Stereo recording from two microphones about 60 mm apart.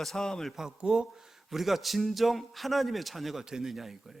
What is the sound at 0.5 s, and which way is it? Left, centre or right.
A man's voice, centre.